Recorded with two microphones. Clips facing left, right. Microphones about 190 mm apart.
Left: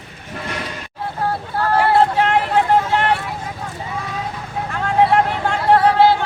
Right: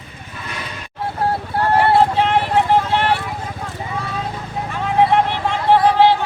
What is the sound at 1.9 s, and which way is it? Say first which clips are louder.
Vehicle: even; centre (ahead or behind).